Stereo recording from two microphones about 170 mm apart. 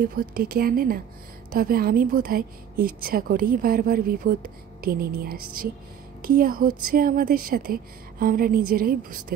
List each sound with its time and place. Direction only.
0.0 s a woman's voice: 60° right (ahead or behind)